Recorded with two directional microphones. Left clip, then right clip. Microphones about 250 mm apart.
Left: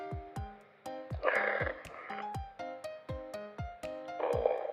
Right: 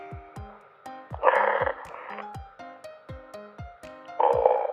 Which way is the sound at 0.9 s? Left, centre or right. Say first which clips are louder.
Right 10 dB; centre.